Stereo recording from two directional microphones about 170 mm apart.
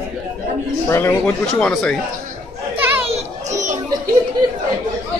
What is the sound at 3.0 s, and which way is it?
Children playing, 40° right (ahead or behind).